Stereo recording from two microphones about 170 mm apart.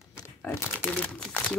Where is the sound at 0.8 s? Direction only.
5° left (ahead or behind).